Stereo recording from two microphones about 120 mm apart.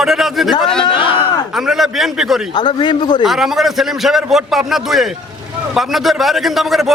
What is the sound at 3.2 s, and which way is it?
A man's voice, 5° right (ahead or behind).